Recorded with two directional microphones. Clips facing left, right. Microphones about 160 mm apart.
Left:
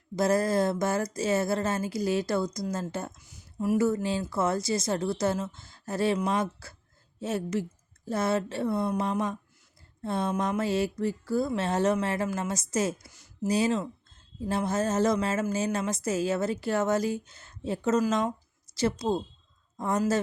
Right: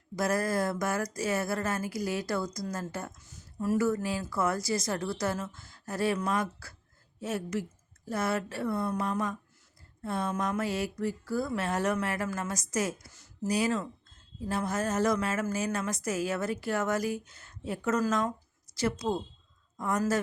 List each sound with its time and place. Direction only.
0.2 s speech: 25° left (ahead or behind)
3.2 s a sound: 10° left (ahead or behind)
3.8 s speech: 25° left (ahead or behind)
13.1 s speech: 15° left (ahead or behind)
13.5 s speech: 25° left (ahead or behind)